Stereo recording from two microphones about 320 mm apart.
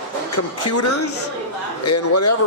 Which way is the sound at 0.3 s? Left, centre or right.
Left.